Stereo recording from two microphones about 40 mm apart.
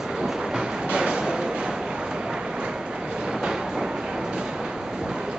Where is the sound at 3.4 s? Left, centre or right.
Centre.